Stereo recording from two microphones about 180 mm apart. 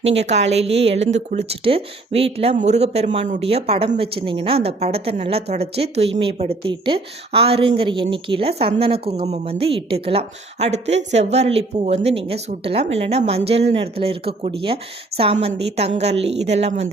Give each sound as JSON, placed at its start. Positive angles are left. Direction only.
{"t": 0.0, "sound": "a woman's voice", "side_deg": -35}